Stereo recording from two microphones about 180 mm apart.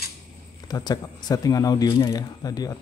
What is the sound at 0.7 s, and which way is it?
Speech, 20° left (ahead or behind).